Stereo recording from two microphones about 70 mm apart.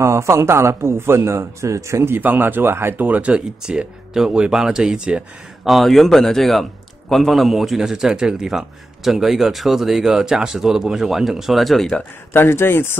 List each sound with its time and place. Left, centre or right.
0.0 s speech: right
2.1 s speech: right
5.7 s a man's voice: centre
12.3 s speech: left